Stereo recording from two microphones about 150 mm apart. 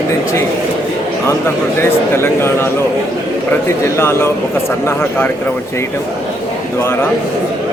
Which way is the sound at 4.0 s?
15° left (ahead or behind).